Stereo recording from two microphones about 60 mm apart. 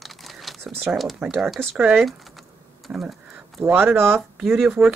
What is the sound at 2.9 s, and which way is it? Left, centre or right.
Speech, centre.